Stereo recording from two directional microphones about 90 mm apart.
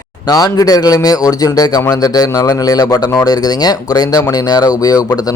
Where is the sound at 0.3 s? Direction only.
45° left (ahead or behind).